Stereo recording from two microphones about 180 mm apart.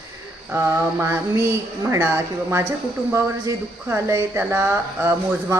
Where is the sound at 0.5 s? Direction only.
15° right (ahead or behind).